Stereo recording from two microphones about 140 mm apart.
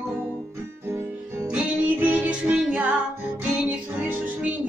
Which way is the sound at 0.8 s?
20° right (ahead or behind).